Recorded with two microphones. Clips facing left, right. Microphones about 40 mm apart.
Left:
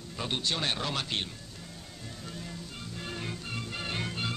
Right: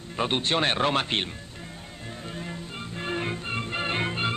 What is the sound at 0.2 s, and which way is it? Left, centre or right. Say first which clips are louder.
Speech: right 7 dB; right.